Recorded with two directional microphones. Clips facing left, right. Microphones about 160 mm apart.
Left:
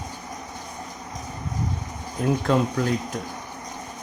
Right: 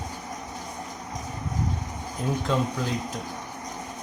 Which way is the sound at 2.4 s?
60° left (ahead or behind).